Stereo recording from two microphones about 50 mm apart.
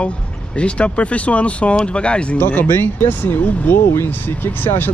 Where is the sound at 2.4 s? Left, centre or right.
Left.